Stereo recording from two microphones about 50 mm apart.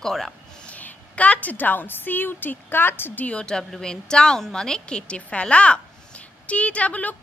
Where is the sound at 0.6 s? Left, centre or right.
Left.